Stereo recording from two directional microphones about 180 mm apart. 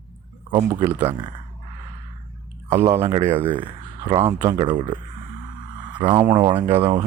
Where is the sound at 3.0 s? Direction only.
30° right (ahead or behind).